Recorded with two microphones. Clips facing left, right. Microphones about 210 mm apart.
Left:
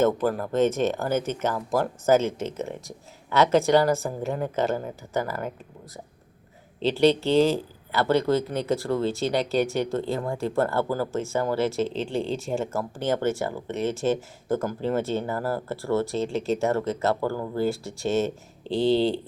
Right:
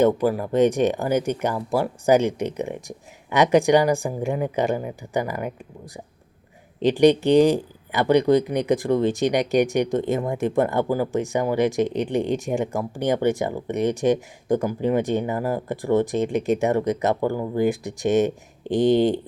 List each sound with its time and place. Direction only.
0.0 s speech: 10° right (ahead or behind)
6.7 s speech: 15° right (ahead or behind)